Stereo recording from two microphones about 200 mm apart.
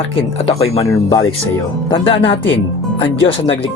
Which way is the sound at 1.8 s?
25° left (ahead or behind).